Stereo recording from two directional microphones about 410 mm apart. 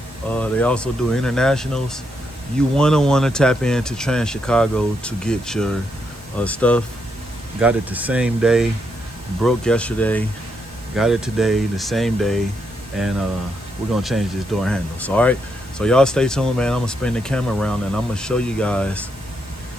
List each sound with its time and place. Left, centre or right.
0.3 s speech: centre
13.9 s speech: centre